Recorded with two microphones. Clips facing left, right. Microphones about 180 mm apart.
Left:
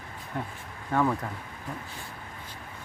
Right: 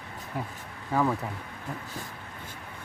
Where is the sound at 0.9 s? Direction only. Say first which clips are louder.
Even; 5° right (ahead or behind).